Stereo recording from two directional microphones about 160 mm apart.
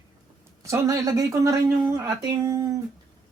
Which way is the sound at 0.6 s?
20° right (ahead or behind).